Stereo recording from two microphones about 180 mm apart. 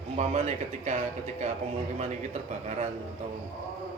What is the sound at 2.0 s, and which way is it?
Speech, 40° right (ahead or behind).